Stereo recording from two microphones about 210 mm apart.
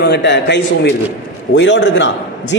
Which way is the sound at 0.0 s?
55° left (ahead or behind).